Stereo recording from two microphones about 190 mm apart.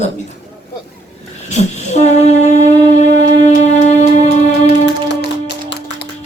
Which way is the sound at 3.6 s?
40° left (ahead or behind).